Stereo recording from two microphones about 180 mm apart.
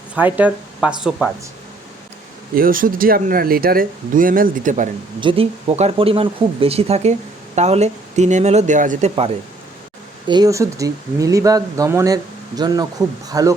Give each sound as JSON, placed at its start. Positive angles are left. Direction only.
{"t": 0.2, "sound": "speech", "side_deg": -10}
{"t": 2.6, "sound": "speech", "side_deg": -50}
{"t": 5.2, "sound": "speech", "side_deg": -30}
{"t": 10.2, "sound": "speech", "side_deg": -20}